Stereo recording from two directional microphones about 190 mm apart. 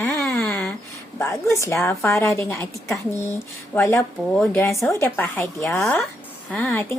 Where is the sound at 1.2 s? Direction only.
15° left (ahead or behind).